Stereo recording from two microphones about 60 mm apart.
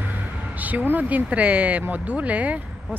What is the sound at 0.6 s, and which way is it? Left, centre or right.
Speech, right.